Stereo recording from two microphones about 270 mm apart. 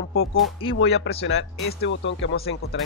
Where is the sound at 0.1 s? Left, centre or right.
Left.